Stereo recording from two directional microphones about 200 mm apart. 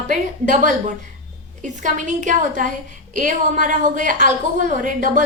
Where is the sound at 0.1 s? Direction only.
40° right (ahead or behind).